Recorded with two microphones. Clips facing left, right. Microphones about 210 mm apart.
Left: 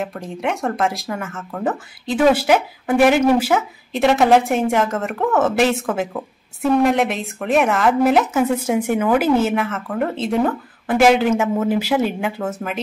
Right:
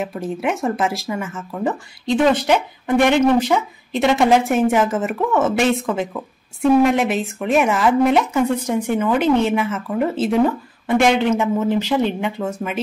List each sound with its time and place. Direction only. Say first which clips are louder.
0.0 s speech: right 2 dB; 5° right (ahead or behind)
6.7 s speech: right 1 dB; centre (ahead or behind)